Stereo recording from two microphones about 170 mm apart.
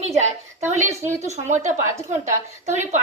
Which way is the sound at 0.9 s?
15° right (ahead or behind).